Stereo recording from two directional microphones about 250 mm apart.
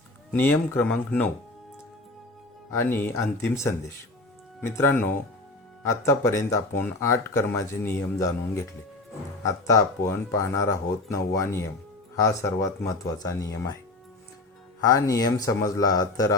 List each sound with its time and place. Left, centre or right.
0.3 s speech: centre
2.7 s speech: centre
14.8 s speech: centre